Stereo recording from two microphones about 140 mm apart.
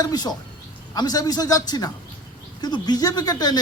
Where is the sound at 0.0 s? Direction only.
30° left (ahead or behind).